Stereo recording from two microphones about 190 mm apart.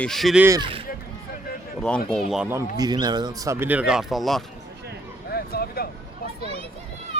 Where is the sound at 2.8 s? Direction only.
20° right (ahead or behind); by 4.4 s centre (ahead or behind).